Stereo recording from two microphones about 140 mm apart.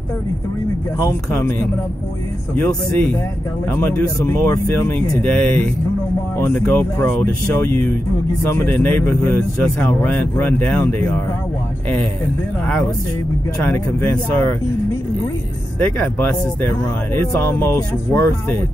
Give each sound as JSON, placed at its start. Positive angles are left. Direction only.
{"t": 0.9, "sound": "speech", "side_deg": 20}
{"t": 2.5, "sound": "speech", "side_deg": 10}
{"t": 13.7, "sound": "speech", "side_deg": 15}
{"t": 15.8, "sound": "speech", "side_deg": 15}